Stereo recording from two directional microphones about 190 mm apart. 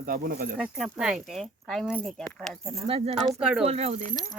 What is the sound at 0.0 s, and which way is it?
Speech, 50° right (ahead or behind).